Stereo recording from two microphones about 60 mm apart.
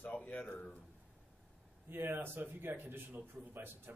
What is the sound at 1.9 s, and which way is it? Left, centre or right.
A man's voice, right.